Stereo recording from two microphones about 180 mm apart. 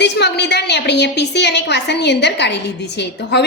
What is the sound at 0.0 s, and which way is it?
A woman's voice, 70° left (ahead or behind).